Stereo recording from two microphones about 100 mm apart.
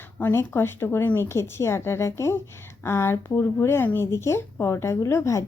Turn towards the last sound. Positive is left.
turn(degrees=30)  # may be behind; listen again after turning